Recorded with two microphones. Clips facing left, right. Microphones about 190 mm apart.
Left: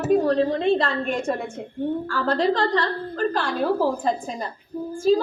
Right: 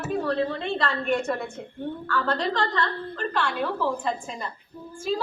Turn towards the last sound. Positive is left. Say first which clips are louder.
# left 9 dB
turn(degrees=40)  # may be behind; listen again after turning